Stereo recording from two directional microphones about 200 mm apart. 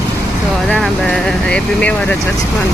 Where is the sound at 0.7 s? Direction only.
5° left (ahead or behind).